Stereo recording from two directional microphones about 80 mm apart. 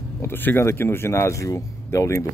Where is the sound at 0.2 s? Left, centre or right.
Left.